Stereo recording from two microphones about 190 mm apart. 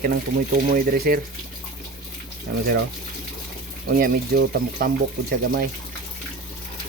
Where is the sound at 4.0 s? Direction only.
50° right (ahead or behind).